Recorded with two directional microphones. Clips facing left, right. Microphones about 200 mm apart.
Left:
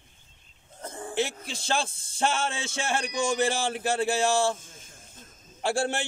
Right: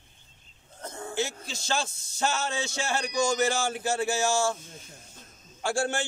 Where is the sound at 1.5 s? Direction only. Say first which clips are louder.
Left 2 dB; 30° left (ahead or behind).